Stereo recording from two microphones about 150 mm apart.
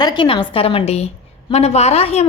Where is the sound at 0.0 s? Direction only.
30° left (ahead or behind).